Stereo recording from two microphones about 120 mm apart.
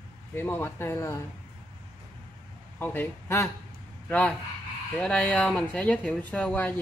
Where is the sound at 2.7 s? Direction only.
15° left (ahead or behind).